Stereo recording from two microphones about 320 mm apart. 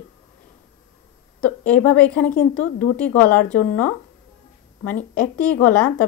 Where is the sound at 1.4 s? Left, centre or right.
Centre.